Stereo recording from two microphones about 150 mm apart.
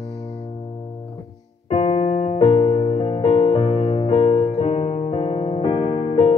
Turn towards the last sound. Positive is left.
turn(degrees=35)  # may be behind; listen again after turning